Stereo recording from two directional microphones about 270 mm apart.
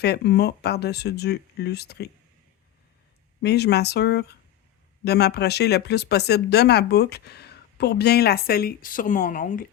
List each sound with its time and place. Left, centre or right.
0.0 s speech: left
3.4 s speech: left